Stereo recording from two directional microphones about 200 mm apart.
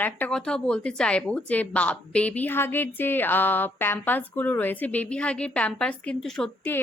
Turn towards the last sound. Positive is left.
turn(degrees=5)  # may be behind; listen again after turning